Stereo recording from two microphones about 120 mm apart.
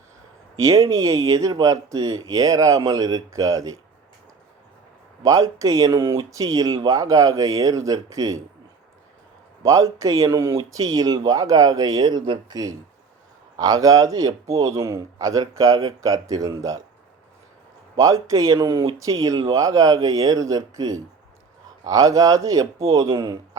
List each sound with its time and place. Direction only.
0.6 s a man's voice: 25° right (ahead or behind)
5.2 s a man's voice: 30° right (ahead or behind)
9.6 s a man's voice: 25° right (ahead or behind)
17.9 s a man's voice: 30° right (ahead or behind)